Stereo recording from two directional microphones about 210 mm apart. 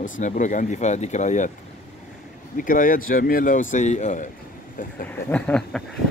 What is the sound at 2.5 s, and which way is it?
Speech, 40° left (ahead or behind).